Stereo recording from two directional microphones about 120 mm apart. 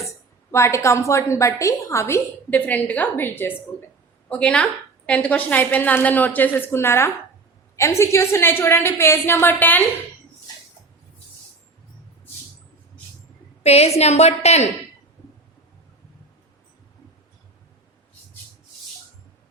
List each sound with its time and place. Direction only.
0.5 s a woman's voice: 25° left (ahead or behind)
13.6 s a woman's voice: 60° left (ahead or behind)